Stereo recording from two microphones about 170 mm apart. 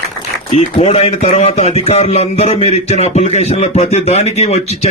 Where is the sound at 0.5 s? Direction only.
35° left (ahead or behind).